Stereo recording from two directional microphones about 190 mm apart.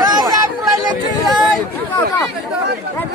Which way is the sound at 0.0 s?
20° right (ahead or behind).